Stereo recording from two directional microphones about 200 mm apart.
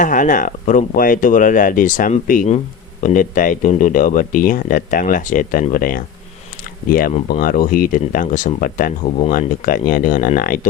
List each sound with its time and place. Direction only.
0.0 s speech: 40° left (ahead or behind)